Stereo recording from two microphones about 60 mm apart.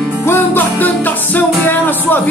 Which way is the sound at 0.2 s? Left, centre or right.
Left.